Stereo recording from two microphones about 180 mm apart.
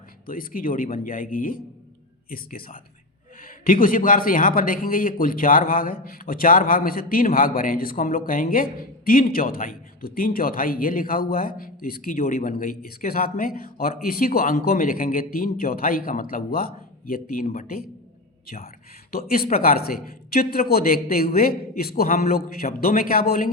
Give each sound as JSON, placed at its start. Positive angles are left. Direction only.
{"t": 0.3, "sound": "a man's voice", "side_deg": 50}
{"t": 19.1, "sound": "a man's voice", "side_deg": 55}